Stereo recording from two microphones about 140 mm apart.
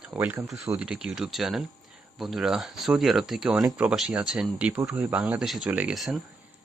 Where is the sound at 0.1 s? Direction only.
15° right (ahead or behind).